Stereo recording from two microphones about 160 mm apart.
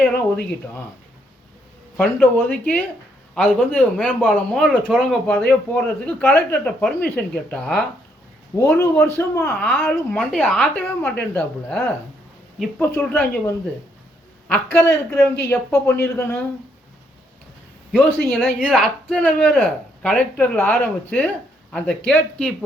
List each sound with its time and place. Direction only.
2.0 s speech: 10° left (ahead or behind)
8.5 s speech: 15° left (ahead or behind)
12.9 s speech: 15° left (ahead or behind)
17.9 s speech: centre (ahead or behind)